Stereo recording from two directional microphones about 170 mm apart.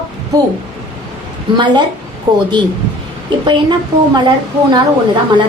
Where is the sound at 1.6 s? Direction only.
25° right (ahead or behind).